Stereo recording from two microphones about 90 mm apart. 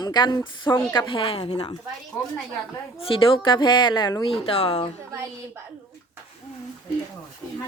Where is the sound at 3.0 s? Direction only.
85° left; by 4.2 s 50° left (ahead or behind).